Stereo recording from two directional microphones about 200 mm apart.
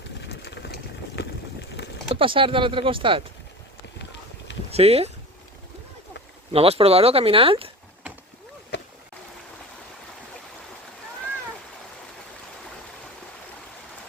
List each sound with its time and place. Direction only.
0.4 s a sound: 60° left (ahead or behind)
2.1 s speech: 25° right (ahead or behind)
4.7 s speech: 30° right (ahead or behind)
6.5 s speech: 30° right (ahead or behind)